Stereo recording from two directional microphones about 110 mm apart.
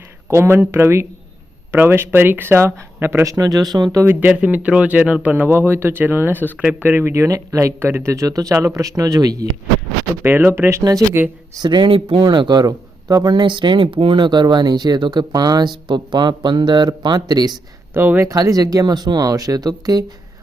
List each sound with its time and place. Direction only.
0.3 s speech: 25° right (ahead or behind)
3.2 s speech: 35° right (ahead or behind)
4.0 s speech: 15° right (ahead or behind); by 9.5 s 35° right (ahead or behind)
10.2 s speech: 20° right (ahead or behind)
11.6 s a man's voice: 45° right (ahead or behind)
17.9 s speech: 20° right (ahead or behind)
18.3 s speech: 35° right (ahead or behind)